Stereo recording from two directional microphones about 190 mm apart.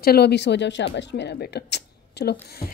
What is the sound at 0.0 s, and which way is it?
Speech, 55° left (ahead or behind).